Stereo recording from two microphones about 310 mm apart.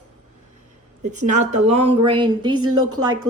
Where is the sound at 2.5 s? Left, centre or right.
Right.